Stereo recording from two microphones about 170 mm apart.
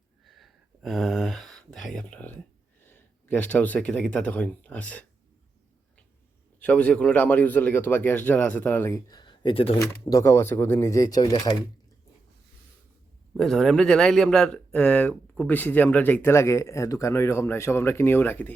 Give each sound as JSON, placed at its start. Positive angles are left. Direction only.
{"t": 0.3, "sound": "a sound", "side_deg": 0}
{"t": 2.8, "sound": "speech", "side_deg": 10}
{"t": 6.6, "sound": "speech", "side_deg": 10}
{"t": 9.8, "sound": "speech", "side_deg": 20}
{"t": 13.3, "sound": "speech", "side_deg": 0}